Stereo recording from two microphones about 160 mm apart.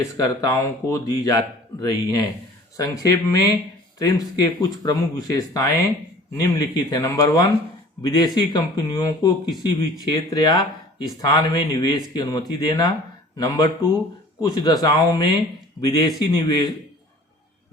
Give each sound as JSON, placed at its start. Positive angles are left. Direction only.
{"t": 0.0, "sound": "speech", "side_deg": 20}